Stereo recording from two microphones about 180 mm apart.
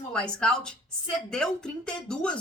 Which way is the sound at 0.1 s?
5° left (ahead or behind).